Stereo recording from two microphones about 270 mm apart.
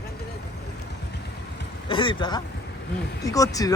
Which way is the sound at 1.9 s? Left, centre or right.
Centre.